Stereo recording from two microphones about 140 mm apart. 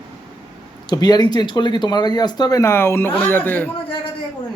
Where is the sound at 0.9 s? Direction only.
30° left (ahead or behind); by 3.7 s 15° left (ahead or behind).